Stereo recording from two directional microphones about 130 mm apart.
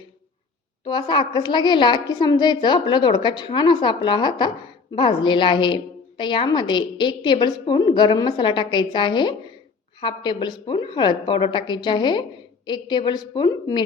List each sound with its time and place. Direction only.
0.9 s a woman's voice: 35° left (ahead or behind)